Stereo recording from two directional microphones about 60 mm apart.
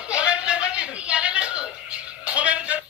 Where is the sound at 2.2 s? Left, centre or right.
Right.